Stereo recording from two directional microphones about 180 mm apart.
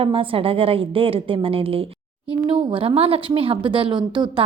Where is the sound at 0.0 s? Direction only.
30° right (ahead or behind).